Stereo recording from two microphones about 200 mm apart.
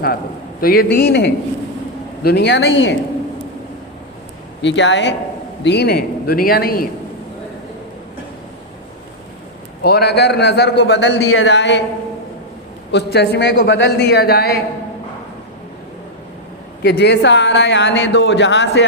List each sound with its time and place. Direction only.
0.6 s speech: 50° left (ahead or behind)
4.6 s speech: 65° left (ahead or behind)
9.8 s speech: 55° left (ahead or behind)
12.9 s speech: 55° left (ahead or behind)
16.8 s speech: 55° left (ahead or behind)